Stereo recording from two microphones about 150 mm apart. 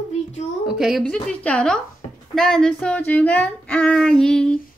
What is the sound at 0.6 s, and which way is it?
A woman's voice, centre (ahead or behind).